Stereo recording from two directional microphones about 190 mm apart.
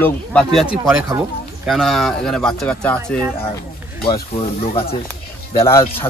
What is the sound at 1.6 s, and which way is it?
Speech, centre (ahead or behind).